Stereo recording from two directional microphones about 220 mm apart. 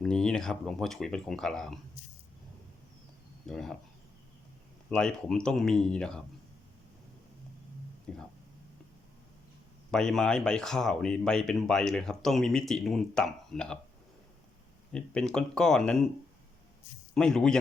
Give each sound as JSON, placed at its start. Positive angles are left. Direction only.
{"t": 0.0, "sound": "speech", "side_deg": 5}
{"t": 3.4, "sound": "speech", "side_deg": 0}
{"t": 4.9, "sound": "speech", "side_deg": 5}
{"t": 8.1, "sound": "speech", "side_deg": 0}
{"t": 9.9, "sound": "speech", "side_deg": 0}
{"t": 14.9, "sound": "speech", "side_deg": 5}
{"t": 17.2, "sound": "speech", "side_deg": 5}